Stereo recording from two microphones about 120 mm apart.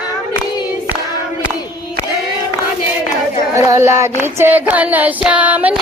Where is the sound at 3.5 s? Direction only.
25° right (ahead or behind).